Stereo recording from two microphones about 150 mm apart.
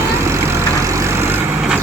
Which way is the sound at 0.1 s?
15° right (ahead or behind).